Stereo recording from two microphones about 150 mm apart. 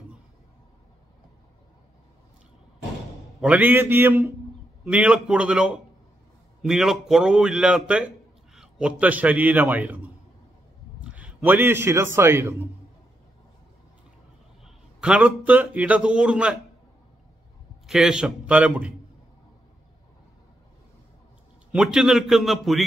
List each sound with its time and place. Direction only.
3.3 s a man's voice: 5° right (ahead or behind)
14.6 s a man's voice: 5° right (ahead or behind)
17.8 s a man's voice: 5° right (ahead or behind)
21.7 s a man's voice: 5° right (ahead or behind)